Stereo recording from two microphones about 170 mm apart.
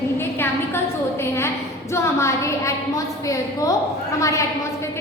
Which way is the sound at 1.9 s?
15° left (ahead or behind).